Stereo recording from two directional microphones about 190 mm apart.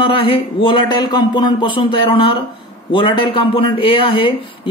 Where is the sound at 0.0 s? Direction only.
25° left (ahead or behind).